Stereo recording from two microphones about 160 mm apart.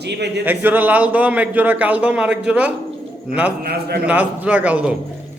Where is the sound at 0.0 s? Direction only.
90° right.